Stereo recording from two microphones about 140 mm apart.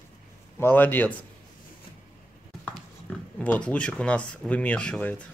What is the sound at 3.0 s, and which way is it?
Speech, 10° left (ahead or behind).